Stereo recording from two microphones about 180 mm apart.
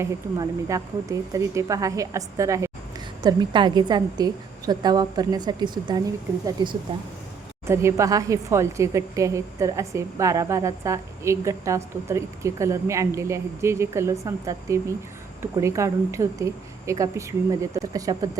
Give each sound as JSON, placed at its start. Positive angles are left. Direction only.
{"t": 0.0, "sound": "a woman's voice", "side_deg": -20}